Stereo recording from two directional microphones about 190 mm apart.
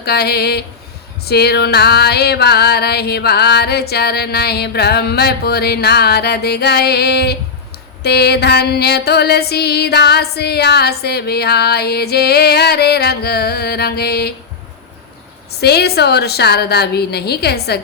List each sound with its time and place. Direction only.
0.0 s music: 55° left (ahead or behind)
15.6 s music: 60° left (ahead or behind)